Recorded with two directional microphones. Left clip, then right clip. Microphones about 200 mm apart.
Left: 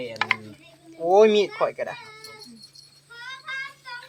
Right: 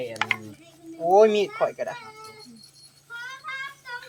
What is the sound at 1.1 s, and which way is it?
Speech, 15° left (ahead or behind).